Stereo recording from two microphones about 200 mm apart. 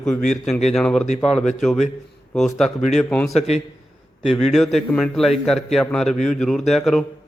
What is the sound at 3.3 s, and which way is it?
Speech, 35° left (ahead or behind).